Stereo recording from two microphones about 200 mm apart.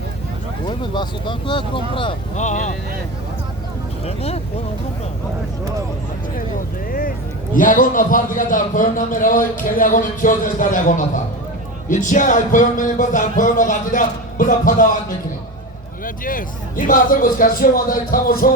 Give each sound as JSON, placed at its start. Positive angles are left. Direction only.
{"t": 0.8, "sound": "speech", "side_deg": 25}
{"t": 2.3, "sound": "speech", "side_deg": 35}
{"t": 4.0, "sound": "speech", "side_deg": 30}
{"t": 7.5, "sound": "a man's voice", "side_deg": 45}
{"t": 16.0, "sound": "a man's voice", "side_deg": 45}